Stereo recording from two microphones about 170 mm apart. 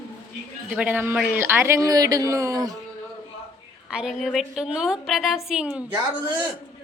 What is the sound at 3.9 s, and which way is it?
A woman's voice, 5° right (ahead or behind).